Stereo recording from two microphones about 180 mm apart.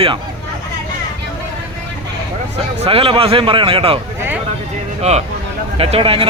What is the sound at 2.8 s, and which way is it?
A man's voice, 30° right (ahead or behind).